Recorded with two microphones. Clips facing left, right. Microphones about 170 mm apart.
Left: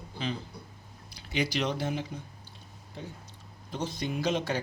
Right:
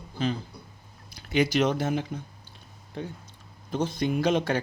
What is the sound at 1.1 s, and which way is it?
Speech, 50° right (ahead or behind).